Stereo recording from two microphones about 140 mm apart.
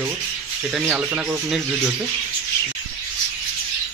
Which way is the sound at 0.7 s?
10° right (ahead or behind).